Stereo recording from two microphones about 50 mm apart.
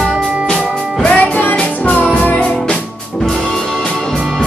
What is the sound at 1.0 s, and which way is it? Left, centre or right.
Music, left.